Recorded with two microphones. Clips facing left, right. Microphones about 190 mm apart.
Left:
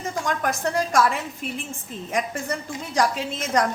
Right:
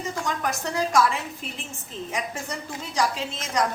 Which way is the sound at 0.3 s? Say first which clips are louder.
Left 5 dB; 55° left (ahead or behind).